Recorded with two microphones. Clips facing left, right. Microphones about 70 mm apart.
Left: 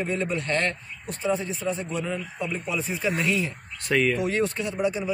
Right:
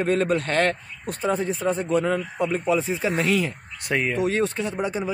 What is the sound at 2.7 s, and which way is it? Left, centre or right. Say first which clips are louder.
Speech: right 3 dB; right.